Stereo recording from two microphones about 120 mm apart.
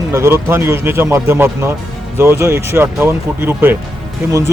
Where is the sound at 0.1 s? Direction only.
20° right (ahead or behind).